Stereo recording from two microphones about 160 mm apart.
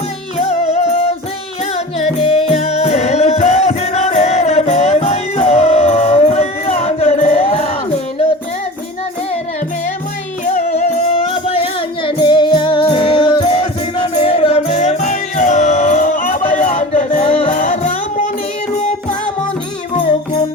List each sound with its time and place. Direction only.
0.4 s music: 40° left (ahead or behind)
2.2 s music: 40° left (ahead or behind)
10.4 s music: 45° left (ahead or behind)
17.6 s music: 50° left (ahead or behind)